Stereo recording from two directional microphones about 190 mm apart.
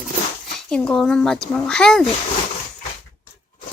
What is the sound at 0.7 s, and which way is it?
Speech, 5° left (ahead or behind).